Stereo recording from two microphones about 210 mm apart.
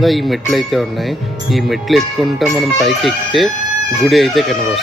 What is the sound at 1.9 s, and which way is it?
Speech, centre (ahead or behind).